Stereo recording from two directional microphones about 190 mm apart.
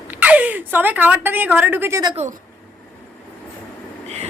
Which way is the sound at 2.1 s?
35° right (ahead or behind).